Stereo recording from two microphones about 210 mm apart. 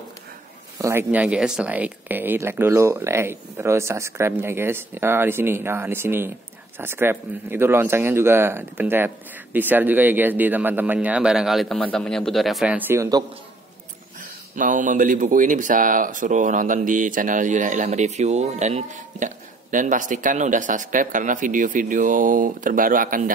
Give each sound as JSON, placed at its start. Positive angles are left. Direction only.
{"t": 0.7, "sound": "speech", "side_deg": -10}
{"t": 14.6, "sound": "speech", "side_deg": -40}